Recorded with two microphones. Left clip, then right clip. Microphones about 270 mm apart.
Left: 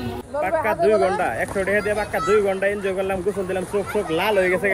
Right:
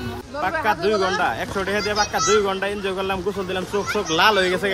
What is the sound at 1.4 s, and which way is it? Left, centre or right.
A man's voice, centre.